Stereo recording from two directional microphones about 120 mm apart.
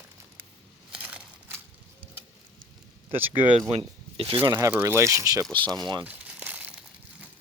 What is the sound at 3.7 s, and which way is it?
Speech, 50° right (ahead or behind).